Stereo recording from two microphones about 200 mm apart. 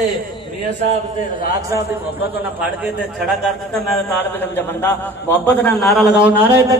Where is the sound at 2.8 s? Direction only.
Centre (ahead or behind).